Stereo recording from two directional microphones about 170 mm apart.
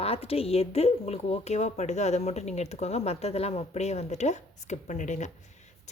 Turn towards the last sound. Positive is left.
turn(degrees=45)  # may be behind; listen again after turning